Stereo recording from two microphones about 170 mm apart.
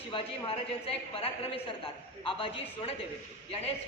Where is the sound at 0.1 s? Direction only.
30° left (ahead or behind).